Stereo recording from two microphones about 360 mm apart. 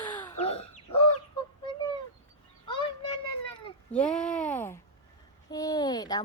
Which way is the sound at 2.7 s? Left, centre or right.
Centre.